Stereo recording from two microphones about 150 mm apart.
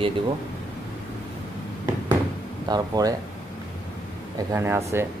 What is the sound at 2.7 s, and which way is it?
Speech, 25° right (ahead or behind).